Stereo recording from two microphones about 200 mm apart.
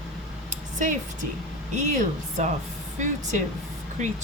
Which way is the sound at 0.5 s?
40° right (ahead or behind).